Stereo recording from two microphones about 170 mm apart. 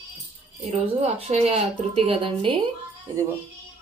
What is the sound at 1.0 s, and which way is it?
Speech, 40° right (ahead or behind).